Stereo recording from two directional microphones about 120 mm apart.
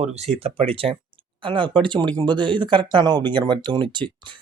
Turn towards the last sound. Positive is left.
turn(degrees=-40)  # may be behind; listen again after turning